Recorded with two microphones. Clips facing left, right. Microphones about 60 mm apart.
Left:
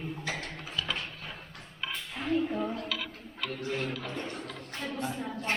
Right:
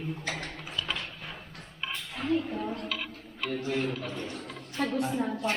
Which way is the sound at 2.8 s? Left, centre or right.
Centre.